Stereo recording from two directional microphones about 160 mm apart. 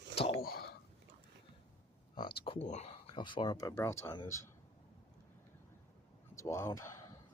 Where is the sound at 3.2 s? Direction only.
30° left (ahead or behind).